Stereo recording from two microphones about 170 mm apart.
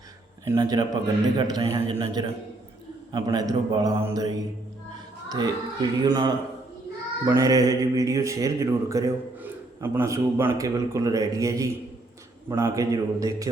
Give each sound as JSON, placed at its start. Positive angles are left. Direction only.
{"t": 0.4, "sound": "speech", "side_deg": -20}